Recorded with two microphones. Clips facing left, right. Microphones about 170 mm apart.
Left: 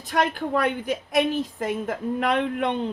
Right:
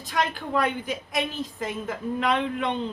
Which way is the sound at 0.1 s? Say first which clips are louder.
Left 3 dB; 55° left (ahead or behind).